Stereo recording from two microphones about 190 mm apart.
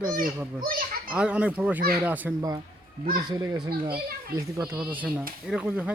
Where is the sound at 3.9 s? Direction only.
55° right (ahead or behind).